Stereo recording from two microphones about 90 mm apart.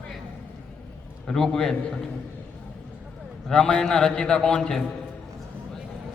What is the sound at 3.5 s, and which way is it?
A man's voice, 10° left (ahead or behind).